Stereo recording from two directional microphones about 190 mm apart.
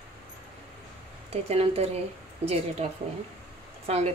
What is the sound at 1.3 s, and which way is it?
A woman's voice, 30° right (ahead or behind).